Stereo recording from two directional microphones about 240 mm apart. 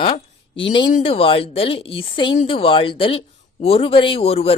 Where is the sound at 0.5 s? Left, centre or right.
Left.